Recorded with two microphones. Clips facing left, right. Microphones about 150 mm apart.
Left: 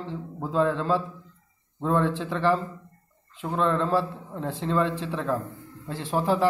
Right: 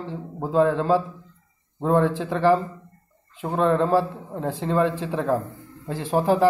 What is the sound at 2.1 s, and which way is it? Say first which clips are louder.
Speech: right 3 dB; 40° right (ahead or behind).